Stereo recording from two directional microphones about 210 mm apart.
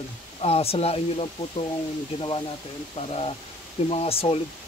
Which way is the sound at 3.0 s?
30° left (ahead or behind).